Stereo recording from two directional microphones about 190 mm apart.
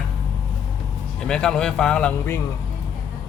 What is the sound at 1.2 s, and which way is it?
Speech, 5° left (ahead or behind).